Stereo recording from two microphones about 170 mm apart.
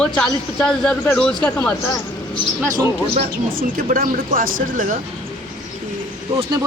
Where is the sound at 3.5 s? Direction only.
55° right (ahead or behind).